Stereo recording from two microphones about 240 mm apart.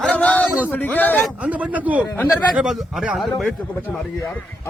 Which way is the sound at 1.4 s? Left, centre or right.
Centre.